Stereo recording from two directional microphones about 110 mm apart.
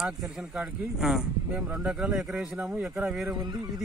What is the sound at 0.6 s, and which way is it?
Speech, 5° right (ahead or behind).